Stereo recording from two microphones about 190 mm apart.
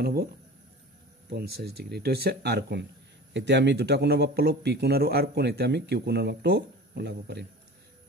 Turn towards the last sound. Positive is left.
turn(degrees=-65)  # may be behind; listen again after turning